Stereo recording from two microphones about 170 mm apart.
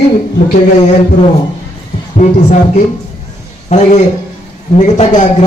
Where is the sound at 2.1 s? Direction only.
45° left (ahead or behind).